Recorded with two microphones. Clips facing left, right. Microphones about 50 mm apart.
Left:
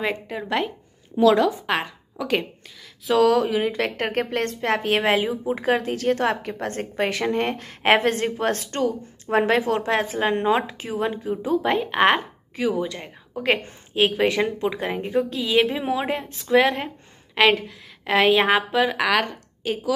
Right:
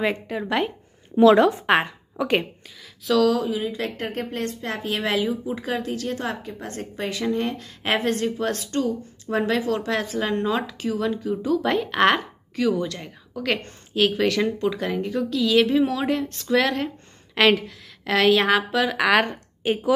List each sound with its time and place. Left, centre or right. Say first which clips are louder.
0.0 s a woman's voice: right 2 dB; centre
1.2 s a woman's voice: right 2 dB; right
2.1 s a woman's voice: right 2 dB; centre
3.2 s speech: left 3 dB; left
11.6 s a woman's voice: left 1 dB; centre
13.3 s a woman's voice: left 3 dB; left
17.4 s a woman's voice: even; centre
19.1 s a woman's voice: right 2 dB; right